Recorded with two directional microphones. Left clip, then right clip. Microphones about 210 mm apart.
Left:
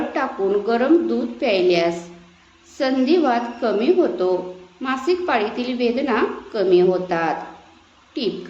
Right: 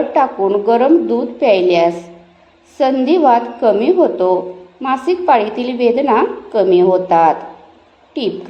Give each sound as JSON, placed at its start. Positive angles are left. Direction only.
{"t": 0.1, "sound": "a woman's voice", "side_deg": -15}